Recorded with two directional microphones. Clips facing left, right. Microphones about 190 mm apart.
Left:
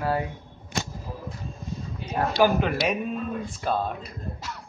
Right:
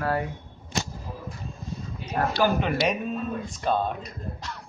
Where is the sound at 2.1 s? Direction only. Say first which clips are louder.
Left 2 dB; centre (ahead or behind).